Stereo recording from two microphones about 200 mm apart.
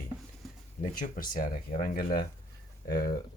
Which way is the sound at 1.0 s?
45° left (ahead or behind).